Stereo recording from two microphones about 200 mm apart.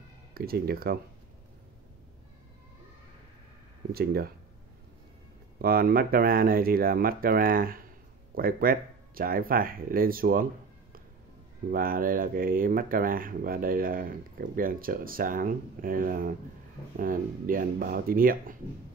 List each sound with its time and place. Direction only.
0.3 s speech: 50° right (ahead or behind)
3.9 s speech: 50° right (ahead or behind)
5.6 s speech: 50° right (ahead or behind)
11.7 s speech: 45° right (ahead or behind)